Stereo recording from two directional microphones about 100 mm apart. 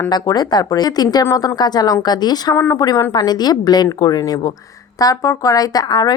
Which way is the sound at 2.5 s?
25° left (ahead or behind).